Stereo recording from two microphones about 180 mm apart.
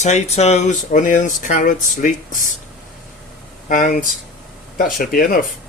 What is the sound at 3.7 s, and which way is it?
Speech, 50° left (ahead or behind).